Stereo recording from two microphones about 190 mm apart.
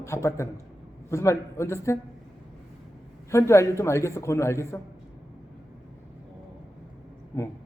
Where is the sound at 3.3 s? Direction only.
15° left (ahead or behind).